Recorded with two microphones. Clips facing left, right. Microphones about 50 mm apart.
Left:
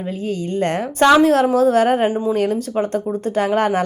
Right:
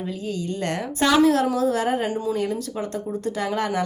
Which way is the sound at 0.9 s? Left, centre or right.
Left.